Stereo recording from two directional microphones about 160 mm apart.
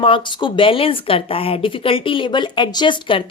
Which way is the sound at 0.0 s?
30° left (ahead or behind).